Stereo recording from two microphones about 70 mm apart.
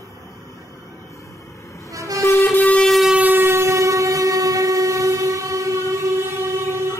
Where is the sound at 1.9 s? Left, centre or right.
Right.